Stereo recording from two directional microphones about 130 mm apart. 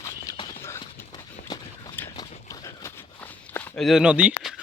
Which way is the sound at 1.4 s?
75° left (ahead or behind).